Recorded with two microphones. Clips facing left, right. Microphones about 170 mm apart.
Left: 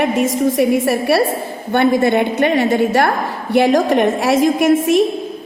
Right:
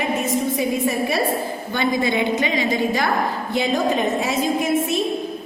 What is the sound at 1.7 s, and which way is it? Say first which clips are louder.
A woman's voice: left 8 dB; 65° left (ahead or behind).